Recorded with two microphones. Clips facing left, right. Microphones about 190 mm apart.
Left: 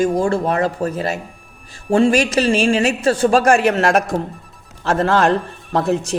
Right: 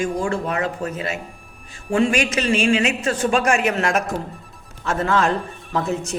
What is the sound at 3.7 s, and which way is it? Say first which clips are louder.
Speech: left 5 dB; 70° left (ahead or behind).